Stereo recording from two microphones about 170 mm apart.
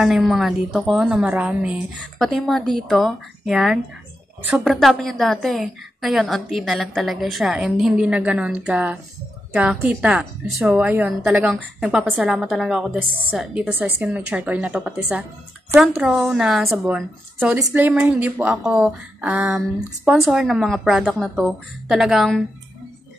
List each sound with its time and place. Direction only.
0.0 s a woman's voice: centre (ahead or behind)